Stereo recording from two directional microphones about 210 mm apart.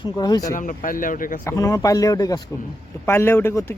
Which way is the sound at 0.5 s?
40° left (ahead or behind).